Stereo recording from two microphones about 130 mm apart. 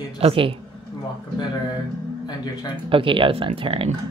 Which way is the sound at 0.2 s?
45° right (ahead or behind).